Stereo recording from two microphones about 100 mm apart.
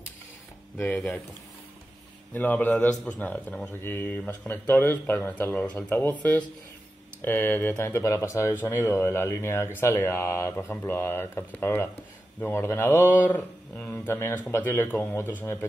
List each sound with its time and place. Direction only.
0.7 s speech: 15° left (ahead or behind)
2.3 s speech: 15° left (ahead or behind)